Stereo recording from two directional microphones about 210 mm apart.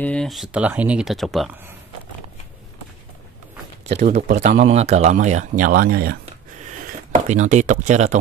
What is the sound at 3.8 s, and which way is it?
Speech, 30° right (ahead or behind).